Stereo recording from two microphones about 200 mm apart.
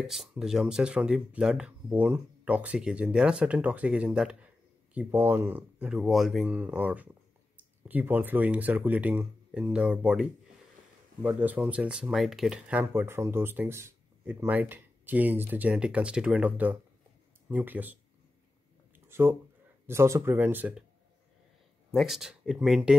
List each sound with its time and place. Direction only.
0.0 s speech: centre (ahead or behind)
11.2 s speech: 10° right (ahead or behind)
19.0 s speech: 10° right (ahead or behind)
21.9 s speech: centre (ahead or behind)